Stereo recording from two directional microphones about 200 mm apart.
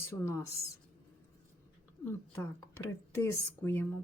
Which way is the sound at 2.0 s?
15° left (ahead or behind).